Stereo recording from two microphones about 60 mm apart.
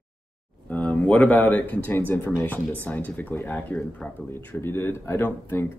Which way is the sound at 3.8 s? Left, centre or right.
Centre.